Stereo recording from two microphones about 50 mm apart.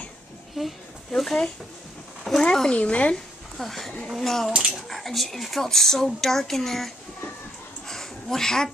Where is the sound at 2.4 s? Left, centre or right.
Centre.